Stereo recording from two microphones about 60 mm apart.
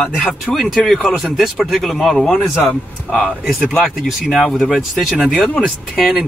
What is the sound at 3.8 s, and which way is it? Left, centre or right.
Speech, centre.